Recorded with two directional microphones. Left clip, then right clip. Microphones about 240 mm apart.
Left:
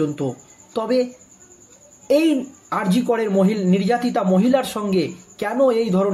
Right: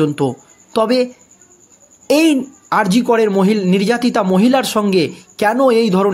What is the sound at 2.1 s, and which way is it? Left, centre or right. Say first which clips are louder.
A man's voice: right 4 dB; right.